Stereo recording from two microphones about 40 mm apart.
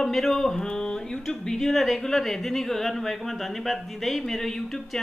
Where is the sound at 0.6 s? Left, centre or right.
Centre.